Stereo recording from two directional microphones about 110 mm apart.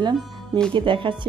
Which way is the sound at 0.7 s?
50° right (ahead or behind).